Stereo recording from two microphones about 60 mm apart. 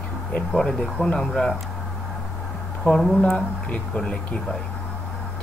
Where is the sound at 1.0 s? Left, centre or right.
Centre.